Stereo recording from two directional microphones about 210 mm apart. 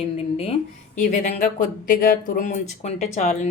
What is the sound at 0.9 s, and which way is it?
Speech, 35° left (ahead or behind).